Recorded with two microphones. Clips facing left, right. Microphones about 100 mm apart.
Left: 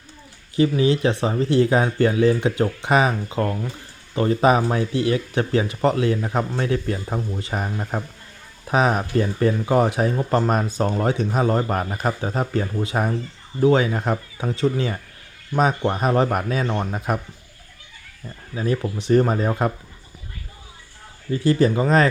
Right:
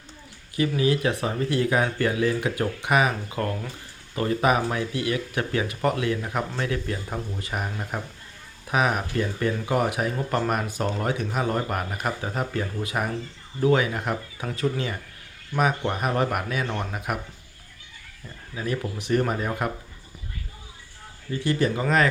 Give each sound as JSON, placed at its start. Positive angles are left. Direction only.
{"t": 0.5, "sound": "speech", "side_deg": 30}
{"t": 18.5, "sound": "speech", "side_deg": 30}
{"t": 21.3, "sound": "speech", "side_deg": 30}